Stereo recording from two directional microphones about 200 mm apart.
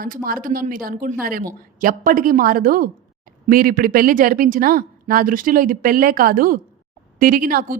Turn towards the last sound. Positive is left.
turn(degrees=-45)  # may be behind; listen again after turning